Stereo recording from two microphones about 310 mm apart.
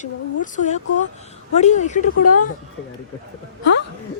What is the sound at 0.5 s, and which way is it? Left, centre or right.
Speech, left.